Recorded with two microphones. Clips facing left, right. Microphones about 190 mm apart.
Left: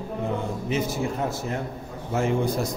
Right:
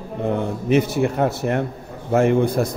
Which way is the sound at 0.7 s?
65° right (ahead or behind).